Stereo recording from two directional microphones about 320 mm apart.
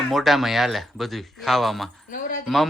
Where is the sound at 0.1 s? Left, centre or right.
Centre.